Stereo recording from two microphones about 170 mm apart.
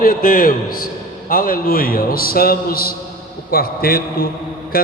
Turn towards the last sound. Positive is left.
turn(degrees=60)  # may be behind; listen again after turning